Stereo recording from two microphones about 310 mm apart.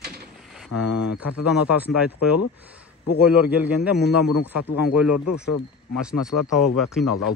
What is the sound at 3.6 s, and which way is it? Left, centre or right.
Speech, centre.